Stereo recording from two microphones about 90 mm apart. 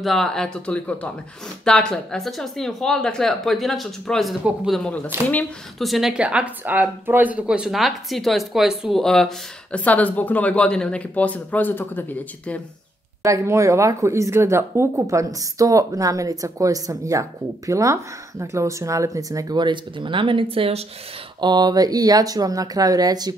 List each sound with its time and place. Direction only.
0.0 s speech: 5° left (ahead or behind)
6.2 s speech: 15° right (ahead or behind); by 12.5 s 20° left (ahead or behind)
13.2 s speech: 35° right (ahead or behind)
19.5 s speech: 60° right (ahead or behind); by 20.7 s 90° right
21.4 s speech: 55° right (ahead or behind)